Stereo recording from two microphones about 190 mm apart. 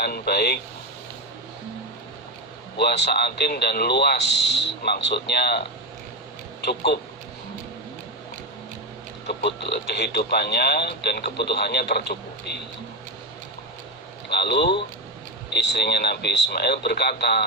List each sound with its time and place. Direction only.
0.0 s speech: 55° left (ahead or behind)
2.7 s speech: 60° left (ahead or behind)
6.7 s speech: 60° left (ahead or behind)
9.2 s speech: 60° left (ahead or behind)
14.3 s speech: 60° left (ahead or behind)